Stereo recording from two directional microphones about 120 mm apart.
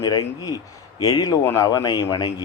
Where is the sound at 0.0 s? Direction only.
30° left (ahead or behind).